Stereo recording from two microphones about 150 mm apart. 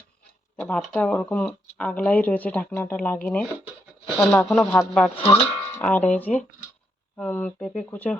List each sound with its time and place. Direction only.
0.6 s speech: 10° left (ahead or behind)
5.1 s speech: 40° left (ahead or behind)
5.8 s speech: 10° left (ahead or behind)